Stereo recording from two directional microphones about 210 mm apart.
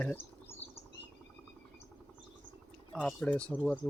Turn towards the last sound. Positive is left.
turn(degrees=5)  # may be behind; listen again after turning